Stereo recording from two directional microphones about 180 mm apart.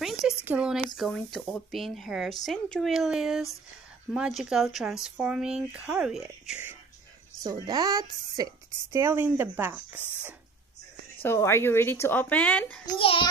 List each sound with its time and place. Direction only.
0.5 s speech: 5° right (ahead or behind)
7.3 s a woman's voice: 20° right (ahead or behind)
11.2 s speech: 15° left (ahead or behind)
12.8 s a child's voice: 25° left (ahead or behind)